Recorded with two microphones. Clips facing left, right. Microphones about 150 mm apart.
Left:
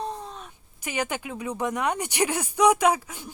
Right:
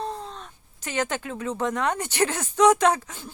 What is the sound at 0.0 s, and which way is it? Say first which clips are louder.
Speech: right 1 dB; 10° left (ahead or behind).